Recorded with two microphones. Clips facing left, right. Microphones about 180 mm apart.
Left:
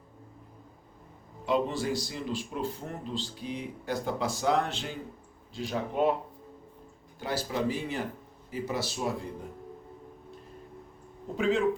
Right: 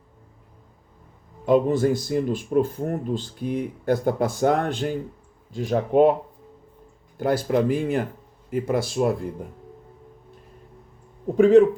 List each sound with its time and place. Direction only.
1.5 s speech: 50° right (ahead or behind)
7.2 s speech: 55° right (ahead or behind)
11.3 s speech: 55° right (ahead or behind)